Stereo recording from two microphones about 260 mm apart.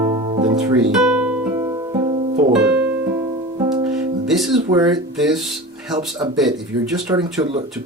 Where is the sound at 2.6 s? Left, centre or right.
Centre.